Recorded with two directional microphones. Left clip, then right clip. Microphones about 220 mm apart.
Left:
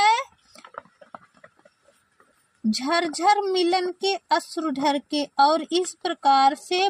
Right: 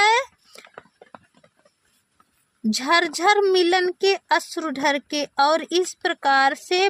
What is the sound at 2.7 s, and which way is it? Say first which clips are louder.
Speech: right 5 dB; 50° right (ahead or behind).